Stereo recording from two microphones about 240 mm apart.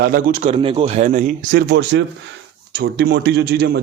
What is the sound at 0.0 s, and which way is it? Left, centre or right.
A man's voice, right.